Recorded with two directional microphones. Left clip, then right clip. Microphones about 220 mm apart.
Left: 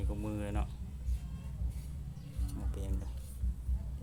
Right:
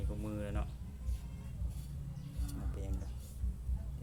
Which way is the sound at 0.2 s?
20° left (ahead or behind).